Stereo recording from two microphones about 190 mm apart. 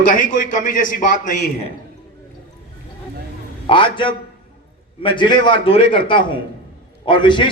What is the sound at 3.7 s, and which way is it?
A man's voice, 25° left (ahead or behind).